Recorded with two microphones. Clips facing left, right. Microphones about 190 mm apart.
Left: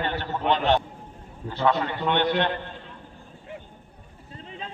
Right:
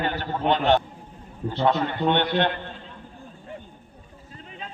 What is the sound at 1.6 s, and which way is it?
Speech, 25° right (ahead or behind).